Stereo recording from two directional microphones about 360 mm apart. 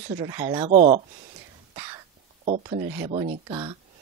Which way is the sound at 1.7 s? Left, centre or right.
Centre.